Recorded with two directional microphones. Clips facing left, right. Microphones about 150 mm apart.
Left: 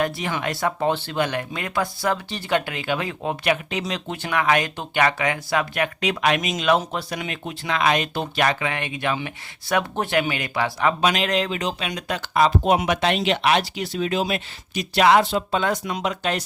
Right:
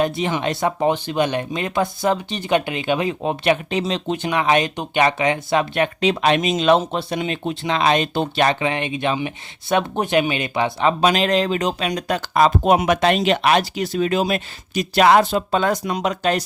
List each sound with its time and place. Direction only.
0.0 s speech: 20° right (ahead or behind); by 16.4 s 40° right (ahead or behind)